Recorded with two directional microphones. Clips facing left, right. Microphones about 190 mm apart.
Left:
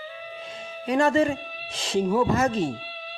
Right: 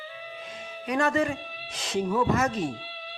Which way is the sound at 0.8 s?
30° left (ahead or behind).